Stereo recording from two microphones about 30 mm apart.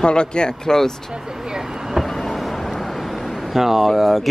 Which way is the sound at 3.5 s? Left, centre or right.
Centre.